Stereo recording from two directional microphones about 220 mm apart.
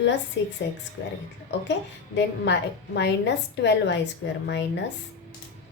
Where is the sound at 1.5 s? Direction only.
55° left (ahead or behind).